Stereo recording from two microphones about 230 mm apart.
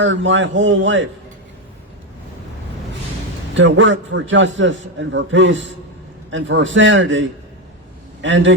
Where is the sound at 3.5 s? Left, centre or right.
Right.